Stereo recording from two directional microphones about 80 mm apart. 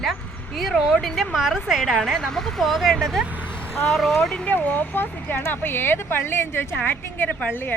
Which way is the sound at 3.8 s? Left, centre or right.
Centre.